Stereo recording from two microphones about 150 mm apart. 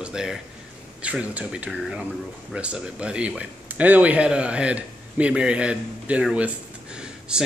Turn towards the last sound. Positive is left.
turn(degrees=-5)  # may be behind; listen again after turning